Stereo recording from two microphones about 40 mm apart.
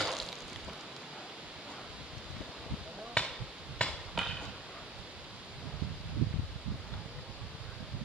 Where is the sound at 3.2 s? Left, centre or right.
Left.